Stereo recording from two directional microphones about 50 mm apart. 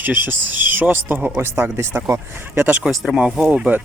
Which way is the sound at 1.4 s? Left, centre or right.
Right.